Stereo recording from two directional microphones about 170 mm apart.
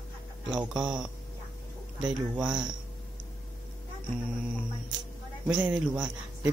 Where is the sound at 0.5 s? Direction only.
5° right (ahead or behind).